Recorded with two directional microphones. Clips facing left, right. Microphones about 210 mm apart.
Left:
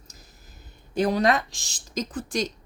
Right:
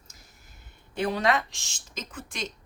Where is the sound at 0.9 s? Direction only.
40° left (ahead or behind).